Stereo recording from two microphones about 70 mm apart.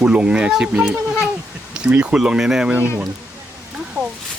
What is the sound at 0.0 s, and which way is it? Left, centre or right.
Speech, centre.